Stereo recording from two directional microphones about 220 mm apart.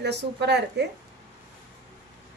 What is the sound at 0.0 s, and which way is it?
Speech, 50° right (ahead or behind).